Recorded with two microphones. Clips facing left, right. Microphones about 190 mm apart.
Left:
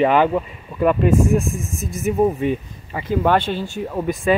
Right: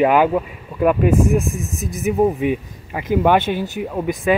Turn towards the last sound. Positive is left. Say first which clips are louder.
# even
turn(degrees=-20)  # may be behind; listen again after turning